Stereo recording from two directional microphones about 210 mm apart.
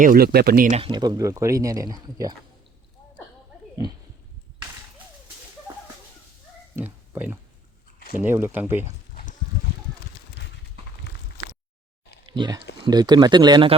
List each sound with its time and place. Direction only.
0.0 s speech: 40° right (ahead or behind)
0.8 s speech: 20° right (ahead or behind)
5.7 s a sound: 15° right (ahead or behind)
8.2 s speech: 10° right (ahead or behind)
12.2 s speech: 20° right (ahead or behind)